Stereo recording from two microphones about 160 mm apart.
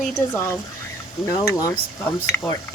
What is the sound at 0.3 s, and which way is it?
Mechanisms, 15° left (ahead or behind).